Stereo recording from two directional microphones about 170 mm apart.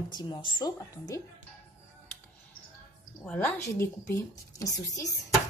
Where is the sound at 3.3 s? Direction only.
10° left (ahead or behind).